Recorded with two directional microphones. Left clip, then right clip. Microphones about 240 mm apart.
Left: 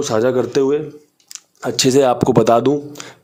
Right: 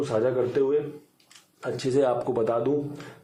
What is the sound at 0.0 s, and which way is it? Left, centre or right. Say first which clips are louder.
Speech: left 8 dB; left.